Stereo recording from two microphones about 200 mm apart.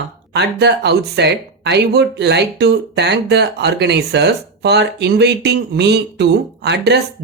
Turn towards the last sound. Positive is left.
turn(degrees=-60)  # may be behind; listen again after turning